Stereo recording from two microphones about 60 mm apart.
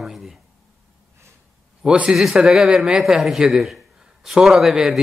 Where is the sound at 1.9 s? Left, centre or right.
Right.